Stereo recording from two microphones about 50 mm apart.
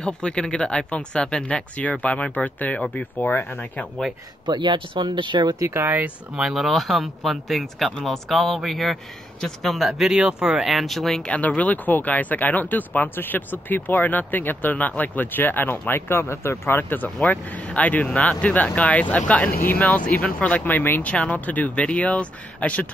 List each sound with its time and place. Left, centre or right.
0.0 s speech: centre
3.3 s speech: left
5.7 s speech: right
6.3 s speech: centre
10.1 s speech: centre
10.6 s speech: centre
11.2 s speech: left
16.1 s speech: left
17.3 s speech: left
19.6 s speech: left
21.0 s speech: left